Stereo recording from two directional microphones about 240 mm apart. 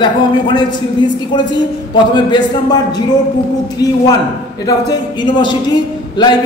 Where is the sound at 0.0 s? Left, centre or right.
Centre.